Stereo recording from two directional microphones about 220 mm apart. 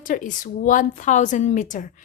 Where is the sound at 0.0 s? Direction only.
40° left (ahead or behind).